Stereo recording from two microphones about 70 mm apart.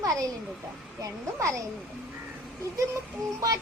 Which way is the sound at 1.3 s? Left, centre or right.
Right.